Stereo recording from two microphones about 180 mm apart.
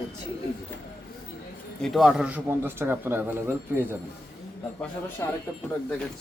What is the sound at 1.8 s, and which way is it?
A man's voice, centre (ahead or behind).